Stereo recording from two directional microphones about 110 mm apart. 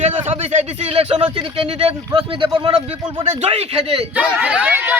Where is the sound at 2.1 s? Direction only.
50° right (ahead or behind).